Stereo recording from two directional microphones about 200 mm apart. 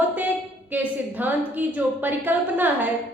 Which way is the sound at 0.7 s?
10° right (ahead or behind).